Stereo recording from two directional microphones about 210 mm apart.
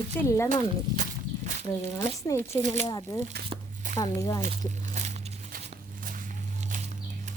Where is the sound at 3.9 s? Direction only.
15° left (ahead or behind).